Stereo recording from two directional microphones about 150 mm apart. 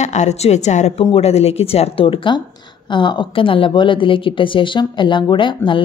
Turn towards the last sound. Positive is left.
turn(degrees=35)  # may be behind; listen again after turning